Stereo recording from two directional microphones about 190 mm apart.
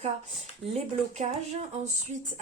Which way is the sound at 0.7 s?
35° right (ahead or behind).